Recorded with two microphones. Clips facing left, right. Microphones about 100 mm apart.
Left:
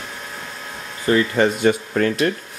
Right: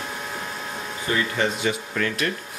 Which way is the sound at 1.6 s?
40° left (ahead or behind).